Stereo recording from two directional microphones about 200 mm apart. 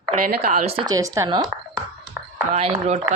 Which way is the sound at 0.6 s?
30° right (ahead or behind).